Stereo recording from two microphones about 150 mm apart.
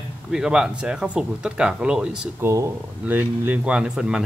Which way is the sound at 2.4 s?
20° right (ahead or behind).